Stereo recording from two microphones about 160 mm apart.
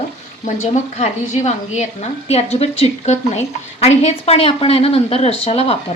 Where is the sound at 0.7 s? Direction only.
45° left (ahead or behind).